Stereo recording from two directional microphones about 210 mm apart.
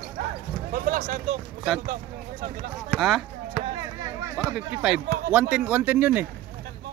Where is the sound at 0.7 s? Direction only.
40° right (ahead or behind).